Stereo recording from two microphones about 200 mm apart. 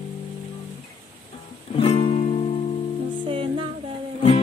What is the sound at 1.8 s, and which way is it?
Music, 30° left (ahead or behind).